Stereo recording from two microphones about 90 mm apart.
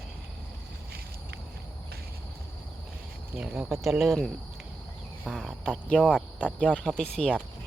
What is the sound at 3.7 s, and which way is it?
Speech, centre (ahead or behind).